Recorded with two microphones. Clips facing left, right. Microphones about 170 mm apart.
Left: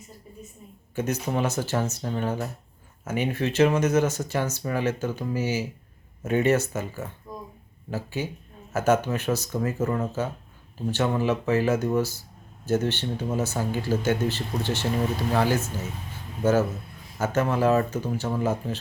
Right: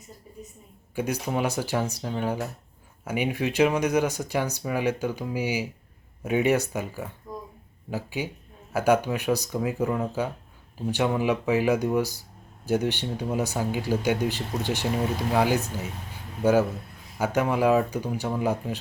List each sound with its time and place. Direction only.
0.9 s speech: 10° right (ahead or behind)